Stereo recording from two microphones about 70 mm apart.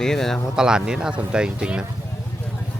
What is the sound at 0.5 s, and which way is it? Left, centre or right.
Speech, centre.